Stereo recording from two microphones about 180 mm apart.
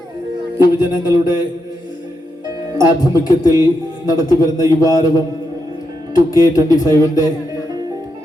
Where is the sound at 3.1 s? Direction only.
20° left (ahead or behind).